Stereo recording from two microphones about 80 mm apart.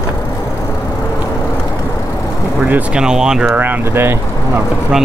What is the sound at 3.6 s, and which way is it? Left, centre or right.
Speech, right.